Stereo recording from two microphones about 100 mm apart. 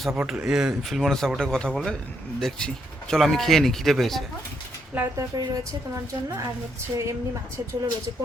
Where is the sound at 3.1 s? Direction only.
5° left (ahead or behind).